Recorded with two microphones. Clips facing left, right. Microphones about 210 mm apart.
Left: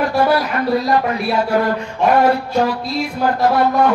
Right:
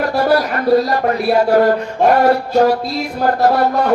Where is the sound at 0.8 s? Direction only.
45° right (ahead or behind).